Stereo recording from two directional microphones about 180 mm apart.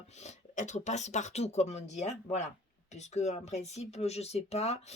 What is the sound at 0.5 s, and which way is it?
Speech, 40° left (ahead or behind).